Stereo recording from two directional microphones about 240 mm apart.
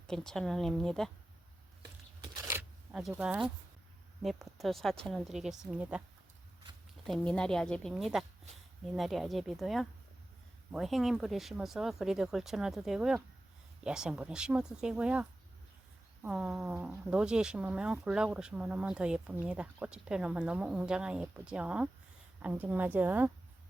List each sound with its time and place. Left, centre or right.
0.1 s speech: centre
2.5 s zipper: centre
4.2 s speech: centre
7.0 s a woman's voice: centre